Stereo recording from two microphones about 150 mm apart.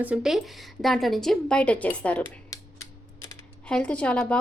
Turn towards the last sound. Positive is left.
turn(degrees=5)  # may be behind; listen again after turning